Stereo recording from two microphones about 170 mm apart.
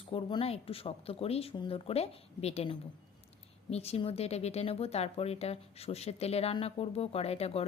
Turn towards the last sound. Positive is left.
turn(degrees=35)  # may be behind; listen again after turning